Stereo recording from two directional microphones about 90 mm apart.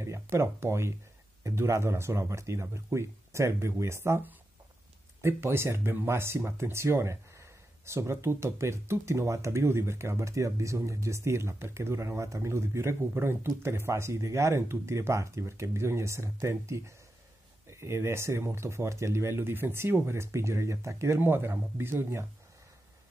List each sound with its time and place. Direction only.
0.0 s speech: 30° right (ahead or behind)